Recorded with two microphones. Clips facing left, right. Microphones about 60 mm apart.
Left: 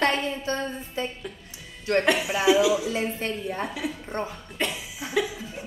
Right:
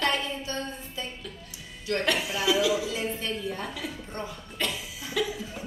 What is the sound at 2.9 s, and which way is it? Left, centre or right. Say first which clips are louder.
Speech: left 3 dB; left.